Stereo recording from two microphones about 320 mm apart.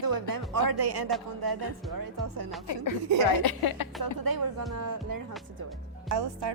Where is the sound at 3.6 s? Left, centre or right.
Left.